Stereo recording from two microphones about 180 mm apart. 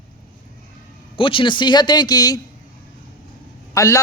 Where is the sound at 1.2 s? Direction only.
30° left (ahead or behind).